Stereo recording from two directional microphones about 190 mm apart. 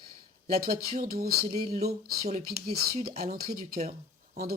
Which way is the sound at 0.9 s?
40° right (ahead or behind).